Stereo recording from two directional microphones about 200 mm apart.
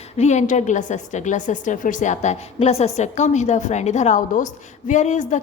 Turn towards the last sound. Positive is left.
turn(degrees=35)  # may be behind; listen again after turning